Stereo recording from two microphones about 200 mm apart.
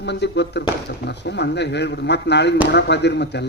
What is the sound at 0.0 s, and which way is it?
Speech, 60° left (ahead or behind).